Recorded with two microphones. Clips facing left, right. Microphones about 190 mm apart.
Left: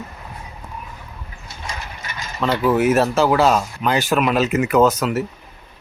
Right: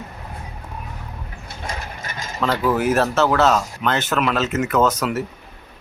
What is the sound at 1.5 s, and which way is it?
Mechanisms, 50° right (ahead or behind).